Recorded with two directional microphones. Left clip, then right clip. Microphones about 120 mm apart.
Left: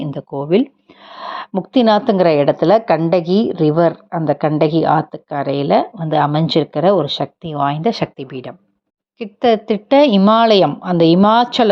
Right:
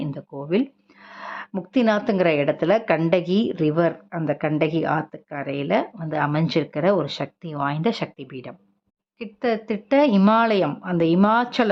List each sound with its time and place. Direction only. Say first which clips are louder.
0.1 s speech: left 11 dB; 40° left (ahead or behind)
0.6 s speech: left 6 dB; 25° left (ahead or behind)
8.0 s speech: left 8 dB; 40° left (ahead or behind)